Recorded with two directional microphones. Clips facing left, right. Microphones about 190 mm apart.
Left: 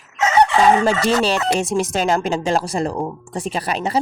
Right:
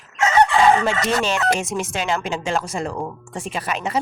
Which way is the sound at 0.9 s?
35° left (ahead or behind).